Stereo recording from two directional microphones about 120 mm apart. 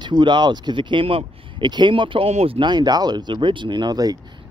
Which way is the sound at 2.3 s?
65° right (ahead or behind).